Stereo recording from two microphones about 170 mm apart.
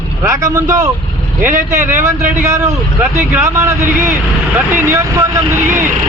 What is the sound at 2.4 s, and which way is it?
A man's voice, 15° right (ahead or behind).